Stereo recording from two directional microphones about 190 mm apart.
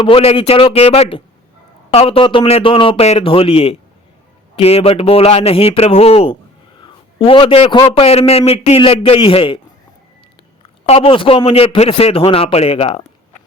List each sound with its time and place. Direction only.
0.0 s a man's voice: 30° left (ahead or behind)
10.8 s a man's voice: 30° left (ahead or behind)